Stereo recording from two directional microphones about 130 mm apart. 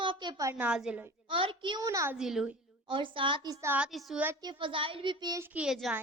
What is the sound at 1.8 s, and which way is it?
Speech, 25° right (ahead or behind).